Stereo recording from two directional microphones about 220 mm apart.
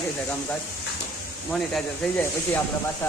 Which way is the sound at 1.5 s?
Centre (ahead or behind).